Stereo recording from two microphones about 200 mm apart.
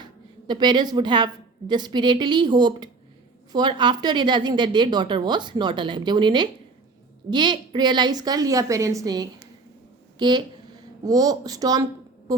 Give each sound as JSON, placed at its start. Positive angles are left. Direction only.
{"t": 0.0, "sound": "a woman's voice", "side_deg": -20}